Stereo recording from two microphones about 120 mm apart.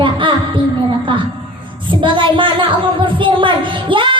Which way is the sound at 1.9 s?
45° right (ahead or behind).